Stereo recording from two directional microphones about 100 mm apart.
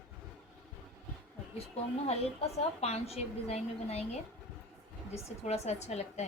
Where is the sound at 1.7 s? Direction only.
90° left.